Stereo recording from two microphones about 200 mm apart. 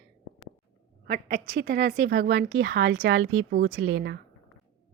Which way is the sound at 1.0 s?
50° right (ahead or behind).